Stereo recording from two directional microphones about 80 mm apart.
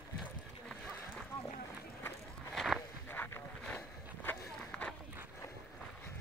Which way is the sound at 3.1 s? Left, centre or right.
Left.